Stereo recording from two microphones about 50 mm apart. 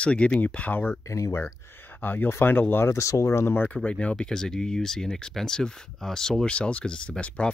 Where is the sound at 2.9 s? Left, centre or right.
Left.